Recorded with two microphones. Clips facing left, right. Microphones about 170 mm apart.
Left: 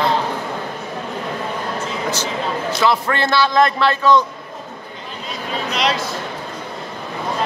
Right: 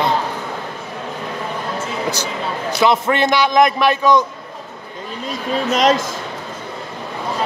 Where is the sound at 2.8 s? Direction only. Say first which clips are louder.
Right 4 dB; 20° right (ahead or behind).